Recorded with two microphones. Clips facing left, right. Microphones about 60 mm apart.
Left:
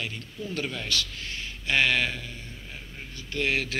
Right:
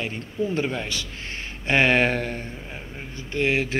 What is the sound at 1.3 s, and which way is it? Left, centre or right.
Speech, right.